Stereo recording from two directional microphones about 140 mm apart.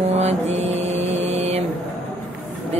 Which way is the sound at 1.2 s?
50° right (ahead or behind).